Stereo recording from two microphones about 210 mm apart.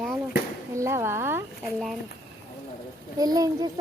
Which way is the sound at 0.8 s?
15° right (ahead or behind).